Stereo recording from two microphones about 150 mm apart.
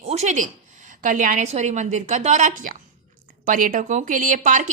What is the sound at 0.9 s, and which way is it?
Speech, 60° right (ahead or behind).